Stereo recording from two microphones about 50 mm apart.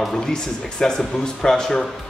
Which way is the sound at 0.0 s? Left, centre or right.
Centre.